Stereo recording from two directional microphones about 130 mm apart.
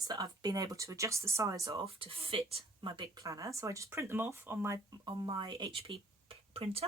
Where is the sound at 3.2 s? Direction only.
25° right (ahead or behind).